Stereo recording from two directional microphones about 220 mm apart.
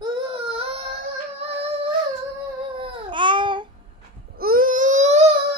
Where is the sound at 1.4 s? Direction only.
30° right (ahead or behind).